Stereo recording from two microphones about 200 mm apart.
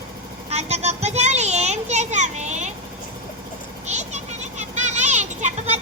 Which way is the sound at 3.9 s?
35° right (ahead or behind).